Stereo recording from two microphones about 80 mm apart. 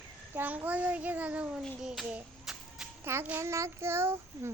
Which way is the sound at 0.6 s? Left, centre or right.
Centre.